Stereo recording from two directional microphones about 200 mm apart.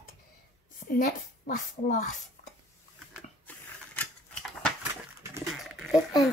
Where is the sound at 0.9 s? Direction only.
45° left (ahead or behind).